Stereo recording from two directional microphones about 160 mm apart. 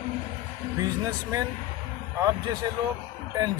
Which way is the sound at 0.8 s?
25° right (ahead or behind).